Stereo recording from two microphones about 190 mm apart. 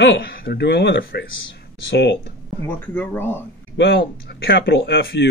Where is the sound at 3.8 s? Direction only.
60° left (ahead or behind).